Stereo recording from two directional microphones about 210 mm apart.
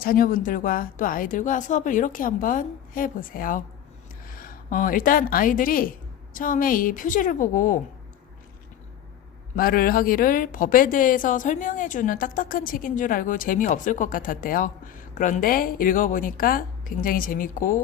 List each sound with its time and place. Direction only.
0.0 s a woman's voice: 40° left (ahead or behind)
9.6 s speech: 45° left (ahead or behind)